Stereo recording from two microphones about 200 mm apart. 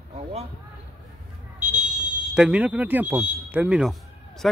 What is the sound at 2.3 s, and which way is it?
Speech, 5° right (ahead or behind).